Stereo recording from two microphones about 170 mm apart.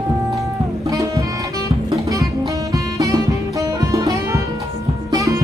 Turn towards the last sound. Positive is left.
turn(degrees=-20)  # may be behind; listen again after turning